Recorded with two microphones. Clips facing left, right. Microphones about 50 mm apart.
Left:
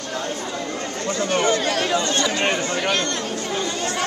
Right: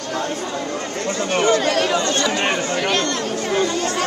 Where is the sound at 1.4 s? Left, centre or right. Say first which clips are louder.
Right 6 dB; right.